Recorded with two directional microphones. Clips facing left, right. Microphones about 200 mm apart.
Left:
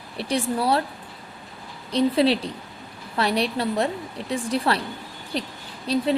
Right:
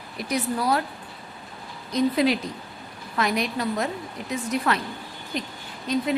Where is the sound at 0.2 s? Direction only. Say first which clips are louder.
Left 2 dB; 30° left (ahead or behind).